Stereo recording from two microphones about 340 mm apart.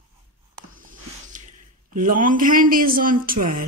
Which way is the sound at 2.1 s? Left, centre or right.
Right.